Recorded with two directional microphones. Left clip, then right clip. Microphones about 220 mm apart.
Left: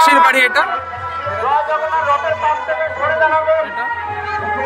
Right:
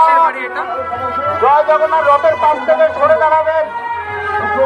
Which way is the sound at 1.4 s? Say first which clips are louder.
Right 6 dB; 55° right (ahead or behind).